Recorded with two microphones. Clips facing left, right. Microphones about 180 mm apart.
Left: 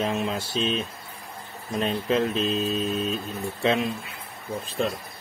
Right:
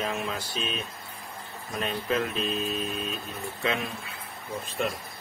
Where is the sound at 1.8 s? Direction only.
25° left (ahead or behind).